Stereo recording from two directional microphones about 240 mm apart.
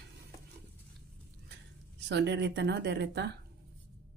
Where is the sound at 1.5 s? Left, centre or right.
Right.